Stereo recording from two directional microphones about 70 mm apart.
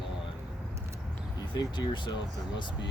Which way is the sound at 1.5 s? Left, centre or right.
Left.